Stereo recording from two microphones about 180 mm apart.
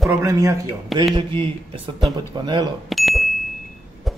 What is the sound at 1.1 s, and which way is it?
Speech, 30° right (ahead or behind).